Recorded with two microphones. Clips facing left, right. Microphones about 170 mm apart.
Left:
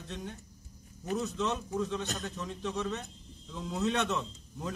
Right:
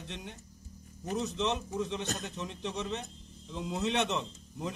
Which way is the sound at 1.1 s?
20° right (ahead or behind).